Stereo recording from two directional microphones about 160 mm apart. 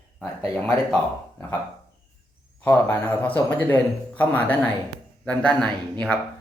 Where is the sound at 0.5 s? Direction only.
5° left (ahead or behind).